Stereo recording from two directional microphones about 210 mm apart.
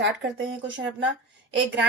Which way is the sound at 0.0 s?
55° right (ahead or behind).